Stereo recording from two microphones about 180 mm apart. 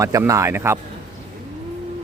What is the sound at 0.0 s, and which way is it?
Speech, 15° right (ahead or behind).